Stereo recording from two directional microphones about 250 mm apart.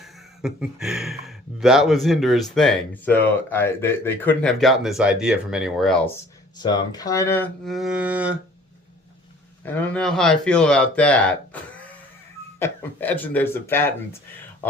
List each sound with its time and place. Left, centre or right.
0.0 s speech: centre
6.6 s speech: centre
9.6 s speech: centre
12.5 s speech: centre